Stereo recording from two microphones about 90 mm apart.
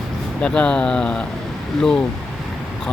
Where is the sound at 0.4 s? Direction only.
10° left (ahead or behind).